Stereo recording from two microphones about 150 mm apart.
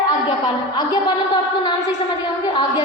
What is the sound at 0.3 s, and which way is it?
Speech, 30° left (ahead or behind).